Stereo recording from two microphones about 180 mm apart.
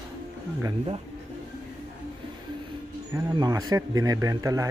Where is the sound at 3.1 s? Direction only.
20° right (ahead or behind).